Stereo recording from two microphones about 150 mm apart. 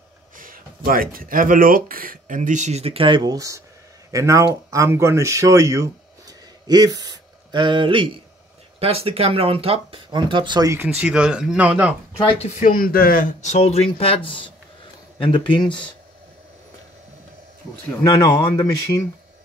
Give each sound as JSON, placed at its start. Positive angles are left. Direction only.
{"t": 0.4, "sound": "speech", "side_deg": -70}
{"t": 10.7, "sound": "speech", "side_deg": -10}
{"t": 12.6, "sound": "speech", "side_deg": 75}
{"t": 13.4, "sound": "speech", "side_deg": 50}
{"t": 18.0, "sound": "speech", "side_deg": 25}